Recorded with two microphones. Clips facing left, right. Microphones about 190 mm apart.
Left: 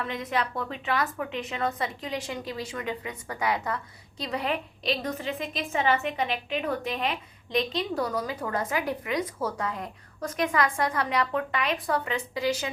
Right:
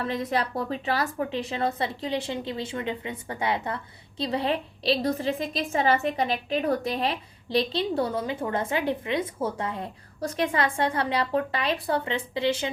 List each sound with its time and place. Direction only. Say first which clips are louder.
0.0 s a woman's voice: right 3 dB; 35° right (ahead or behind)